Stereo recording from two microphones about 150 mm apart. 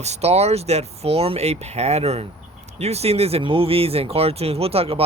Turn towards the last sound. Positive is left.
turn(degrees=-40)  # may be behind; listen again after turning